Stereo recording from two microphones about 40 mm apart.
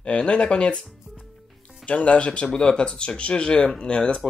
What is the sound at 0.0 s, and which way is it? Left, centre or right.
Speech, left.